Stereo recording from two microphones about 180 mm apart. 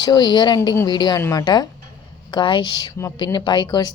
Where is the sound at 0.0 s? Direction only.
25° left (ahead or behind).